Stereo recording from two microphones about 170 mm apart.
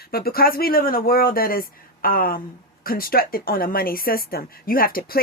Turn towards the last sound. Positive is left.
turn(degrees=60)  # may be behind; listen again after turning